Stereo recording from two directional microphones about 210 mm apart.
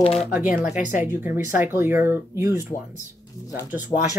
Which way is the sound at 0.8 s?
10° right (ahead or behind).